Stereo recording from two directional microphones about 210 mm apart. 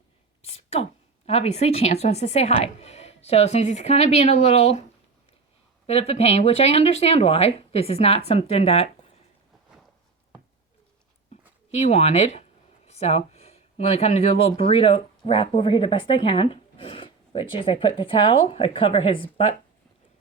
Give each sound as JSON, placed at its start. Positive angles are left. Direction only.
{"t": 0.4, "sound": "whispering", "side_deg": 30}
{"t": 1.3, "sound": "a woman's voice", "side_deg": 30}
{"t": 5.8, "sound": "speech", "side_deg": 30}
{"t": 11.7, "sound": "speech", "side_deg": 30}